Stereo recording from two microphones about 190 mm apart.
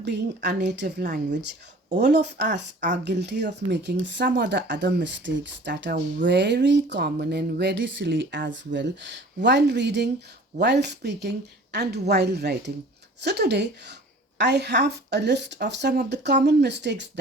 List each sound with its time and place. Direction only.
0.0 s speech: 65° right (ahead or behind)
6.2 s a sound: 65° right (ahead or behind)
8.4 s speech: 70° right (ahead or behind)